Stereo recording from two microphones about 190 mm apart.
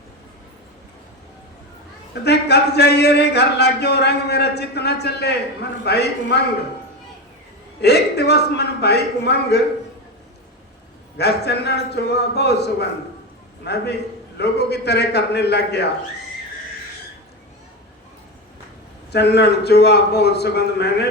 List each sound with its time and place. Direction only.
2.2 s speech: 60° left (ahead or behind)
7.8 s speech: 60° left (ahead or behind)
11.2 s speech: 60° left (ahead or behind)
19.1 s speech: 60° left (ahead or behind)